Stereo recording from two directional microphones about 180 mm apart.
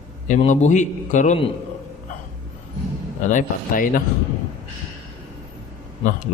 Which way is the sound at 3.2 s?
45° left (ahead or behind).